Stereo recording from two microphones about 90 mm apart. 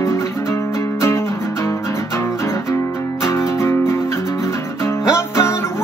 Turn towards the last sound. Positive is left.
turn(degrees=30)  # may be behind; listen again after turning